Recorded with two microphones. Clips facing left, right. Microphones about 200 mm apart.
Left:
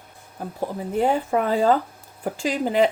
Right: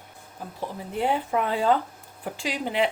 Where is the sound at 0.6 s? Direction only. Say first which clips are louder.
Left 5 dB; 45° left (ahead or behind).